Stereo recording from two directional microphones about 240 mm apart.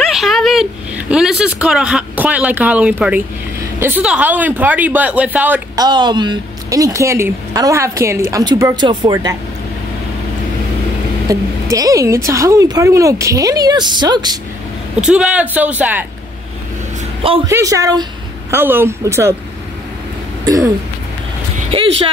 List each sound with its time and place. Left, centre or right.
0.0 s speech: centre
5.9 s speech: centre
11.2 s speech: centre
15.0 s speech: centre
17.5 s speech: centre
20.4 s a sound: centre